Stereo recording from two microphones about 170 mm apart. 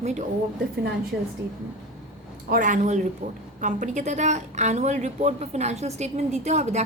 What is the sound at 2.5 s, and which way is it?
Speech, 50° right (ahead or behind).